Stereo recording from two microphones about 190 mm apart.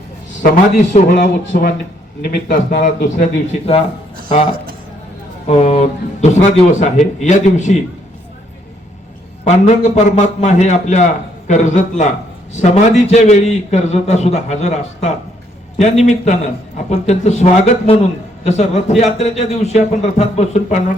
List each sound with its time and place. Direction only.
0.9 s a man's voice: 40° left (ahead or behind)
2.2 s a man's voice: 50° left (ahead or behind)
5.5 s a man's voice: 35° left (ahead or behind)
9.4 s a man's voice: 35° left (ahead or behind)